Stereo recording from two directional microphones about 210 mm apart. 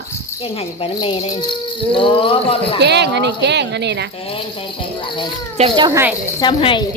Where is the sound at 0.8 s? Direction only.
25° left (ahead or behind).